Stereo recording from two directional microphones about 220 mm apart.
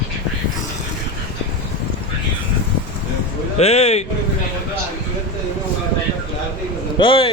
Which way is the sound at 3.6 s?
30° left (ahead or behind).